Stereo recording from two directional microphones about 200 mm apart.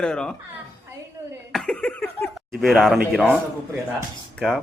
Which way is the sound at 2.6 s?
Centre (ahead or behind).